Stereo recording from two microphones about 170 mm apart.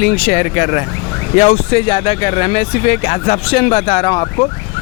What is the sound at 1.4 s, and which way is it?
Speech, 40° left (ahead or behind).